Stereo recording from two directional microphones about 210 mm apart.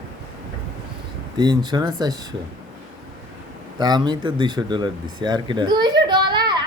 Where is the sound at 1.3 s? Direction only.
20° right (ahead or behind).